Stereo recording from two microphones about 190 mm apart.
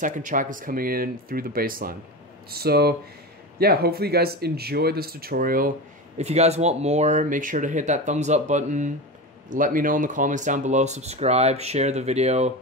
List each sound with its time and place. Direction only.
0.0 s speech: 45° right (ahead or behind)
6.1 s speech: 35° right (ahead or behind)